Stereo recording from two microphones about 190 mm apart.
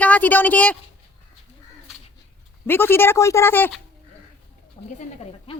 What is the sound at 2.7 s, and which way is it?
A woman's voice, 10° left (ahead or behind).